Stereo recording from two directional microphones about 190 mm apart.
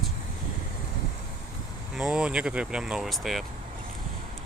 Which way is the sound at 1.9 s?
5° right (ahead or behind).